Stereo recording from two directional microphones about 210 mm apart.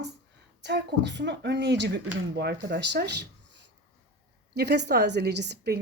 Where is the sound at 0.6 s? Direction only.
55° right (ahead or behind).